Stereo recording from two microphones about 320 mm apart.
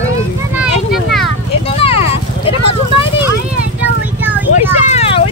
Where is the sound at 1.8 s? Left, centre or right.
Centre.